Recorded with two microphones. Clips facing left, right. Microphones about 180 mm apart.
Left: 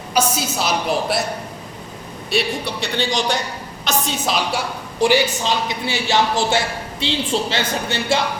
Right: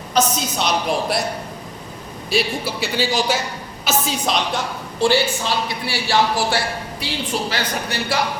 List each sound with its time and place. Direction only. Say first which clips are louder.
0.1 s a woman's voice: even; 10° left (ahead or behind)
2.3 s a woman's voice: even; centre (ahead or behind); by 8.2 s 25° left (ahead or behind)